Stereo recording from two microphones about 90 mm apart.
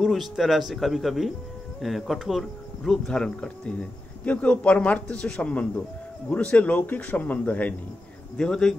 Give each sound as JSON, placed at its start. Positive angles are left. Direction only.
{"t": 0.0, "sound": "speech", "side_deg": 0}